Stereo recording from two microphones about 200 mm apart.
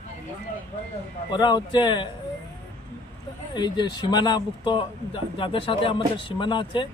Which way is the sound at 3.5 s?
20° left (ahead or behind).